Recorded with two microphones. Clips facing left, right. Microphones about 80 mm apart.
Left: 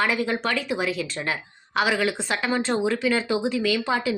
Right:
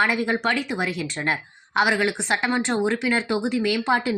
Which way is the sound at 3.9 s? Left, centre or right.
Right.